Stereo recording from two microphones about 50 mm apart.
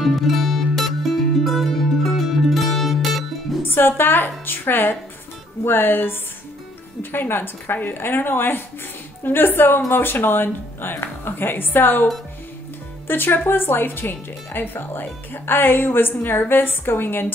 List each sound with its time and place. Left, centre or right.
0.0 s music: centre
3.6 s speech: left